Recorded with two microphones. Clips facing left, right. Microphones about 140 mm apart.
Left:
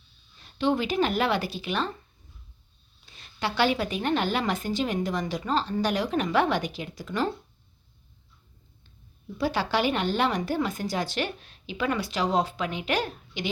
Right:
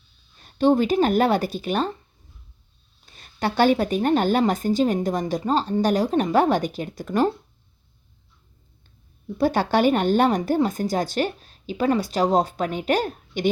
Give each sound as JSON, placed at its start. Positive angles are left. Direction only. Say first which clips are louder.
{"t": 0.3, "sound": "speech", "louder": "right 7 dB", "side_deg": -45}
{"t": 3.1, "sound": "speech", "louder": "right 5 dB", "side_deg": -45}
{"t": 9.4, "sound": "speech", "louder": "right 6 dB", "side_deg": -50}